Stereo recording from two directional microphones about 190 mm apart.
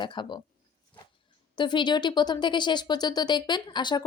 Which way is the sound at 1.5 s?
25° left (ahead or behind).